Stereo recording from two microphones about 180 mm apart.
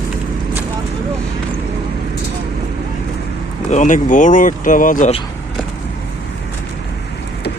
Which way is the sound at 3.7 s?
45° left (ahead or behind).